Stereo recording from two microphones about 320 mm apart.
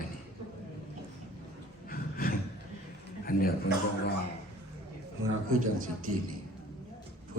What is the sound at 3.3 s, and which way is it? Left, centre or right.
Speech, left.